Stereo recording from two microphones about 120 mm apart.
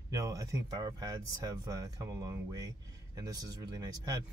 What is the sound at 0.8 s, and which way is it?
Speech, 40° right (ahead or behind).